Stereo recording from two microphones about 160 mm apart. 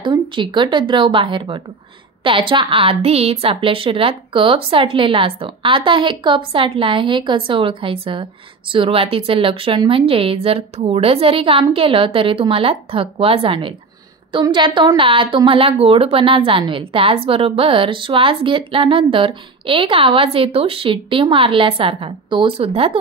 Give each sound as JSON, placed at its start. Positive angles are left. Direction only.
{"t": 0.0, "sound": "a woman's voice", "side_deg": -30}